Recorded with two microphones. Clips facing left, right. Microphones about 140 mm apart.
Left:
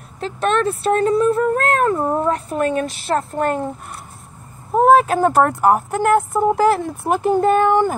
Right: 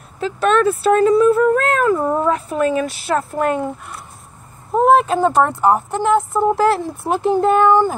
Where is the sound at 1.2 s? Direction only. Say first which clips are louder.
Right 3 dB; 40° left (ahead or behind).